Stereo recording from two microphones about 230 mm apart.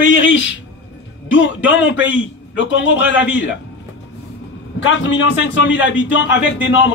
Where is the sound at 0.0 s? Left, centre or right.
Left.